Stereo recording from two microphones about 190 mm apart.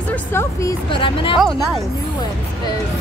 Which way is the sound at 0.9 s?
25° left (ahead or behind).